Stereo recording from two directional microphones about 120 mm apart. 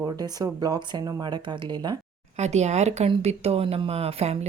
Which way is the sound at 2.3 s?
70° right (ahead or behind).